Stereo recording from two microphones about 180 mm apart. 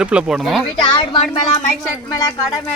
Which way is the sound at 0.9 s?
30° left (ahead or behind).